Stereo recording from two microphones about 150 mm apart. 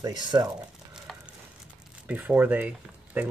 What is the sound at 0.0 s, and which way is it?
Speech, 25° right (ahead or behind).